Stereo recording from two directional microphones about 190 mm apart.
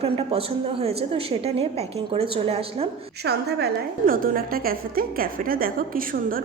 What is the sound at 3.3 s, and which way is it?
A woman's voice, 60° right (ahead or behind).